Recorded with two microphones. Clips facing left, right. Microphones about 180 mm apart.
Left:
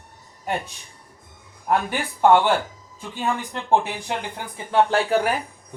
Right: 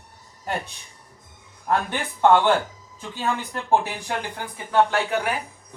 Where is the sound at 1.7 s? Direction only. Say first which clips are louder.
Left 1 dB; 10° left (ahead or behind).